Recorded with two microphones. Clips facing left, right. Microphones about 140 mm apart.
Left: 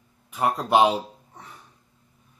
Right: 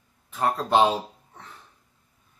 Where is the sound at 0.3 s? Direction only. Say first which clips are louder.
Left 1 dB; 10° left (ahead or behind).